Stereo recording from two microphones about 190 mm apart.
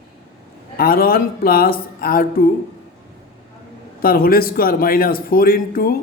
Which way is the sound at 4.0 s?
50° left (ahead or behind).